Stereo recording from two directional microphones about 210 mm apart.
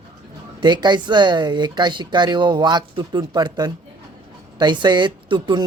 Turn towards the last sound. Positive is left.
turn(degrees=-20)  # may be behind; listen again after turning